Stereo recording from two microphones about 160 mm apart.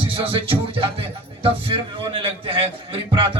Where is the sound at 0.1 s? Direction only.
35° right (ahead or behind).